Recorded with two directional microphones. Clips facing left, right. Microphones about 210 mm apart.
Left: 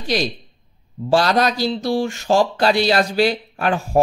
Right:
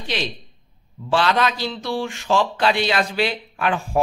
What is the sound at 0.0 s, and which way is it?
Speech, 40° left (ahead or behind).